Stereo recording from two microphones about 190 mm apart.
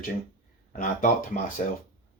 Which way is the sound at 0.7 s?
45° left (ahead or behind).